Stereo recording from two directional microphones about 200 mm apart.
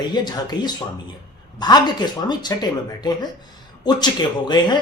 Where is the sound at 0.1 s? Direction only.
20° left (ahead or behind).